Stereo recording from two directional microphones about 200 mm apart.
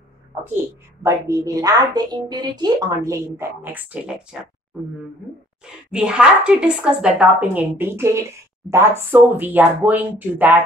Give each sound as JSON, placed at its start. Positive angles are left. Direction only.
{"t": 1.0, "sound": "speech", "side_deg": -15}
{"t": 5.7, "sound": "speech", "side_deg": -5}